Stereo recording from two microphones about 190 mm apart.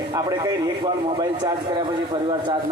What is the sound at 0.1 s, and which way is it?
Speech, 20° right (ahead or behind).